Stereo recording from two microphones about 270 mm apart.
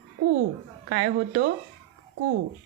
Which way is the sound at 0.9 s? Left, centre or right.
Right.